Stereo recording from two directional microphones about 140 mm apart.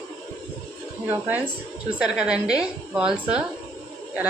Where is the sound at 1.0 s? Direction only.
15° right (ahead or behind).